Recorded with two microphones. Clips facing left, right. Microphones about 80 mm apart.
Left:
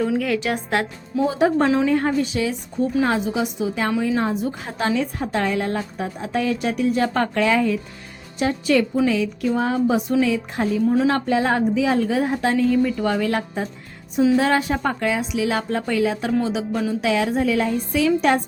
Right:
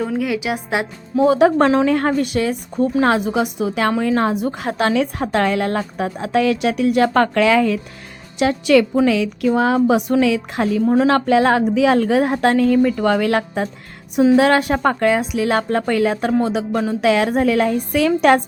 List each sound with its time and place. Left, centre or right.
0.2 s a woman's voice: centre
1.2 s speech: right
2.1 s a woman's voice: right